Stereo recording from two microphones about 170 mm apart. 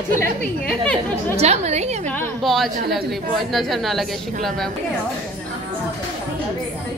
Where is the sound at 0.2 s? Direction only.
5° left (ahead or behind).